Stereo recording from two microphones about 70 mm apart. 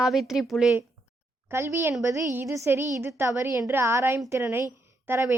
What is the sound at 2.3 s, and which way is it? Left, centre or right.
A woman's voice, right.